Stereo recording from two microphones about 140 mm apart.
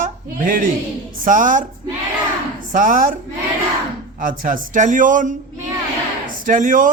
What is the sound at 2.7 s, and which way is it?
Speech, 70° right (ahead or behind).